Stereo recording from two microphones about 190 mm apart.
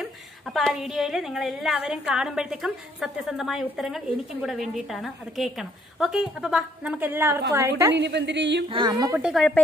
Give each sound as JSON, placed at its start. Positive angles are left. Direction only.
{"t": 0.0, "sound": "a woman's voice", "side_deg": 0}
{"t": 7.9, "sound": "a woman's voice", "side_deg": -65}
{"t": 8.6, "sound": "a woman's voice", "side_deg": -25}
{"t": 9.2, "sound": "a woman's voice", "side_deg": 0}